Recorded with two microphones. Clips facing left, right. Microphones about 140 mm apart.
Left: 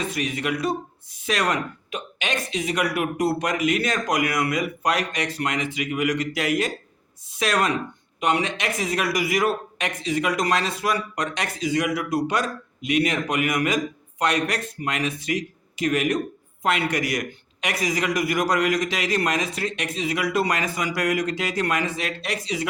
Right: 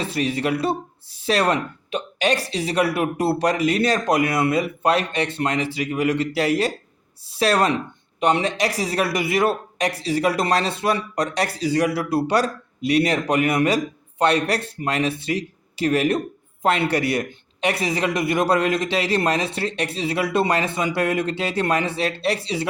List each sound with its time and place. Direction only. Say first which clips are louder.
0.0 s a man's voice: right 4 dB; 30° right (ahead or behind)